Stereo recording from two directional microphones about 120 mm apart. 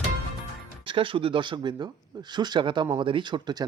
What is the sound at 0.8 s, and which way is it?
Speech, 45° right (ahead or behind).